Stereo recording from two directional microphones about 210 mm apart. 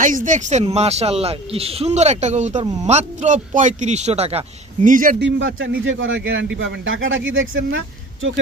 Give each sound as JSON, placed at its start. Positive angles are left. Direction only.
{"t": 0.0, "sound": "speech", "side_deg": -40}
{"t": 5.2, "sound": "speech", "side_deg": -65}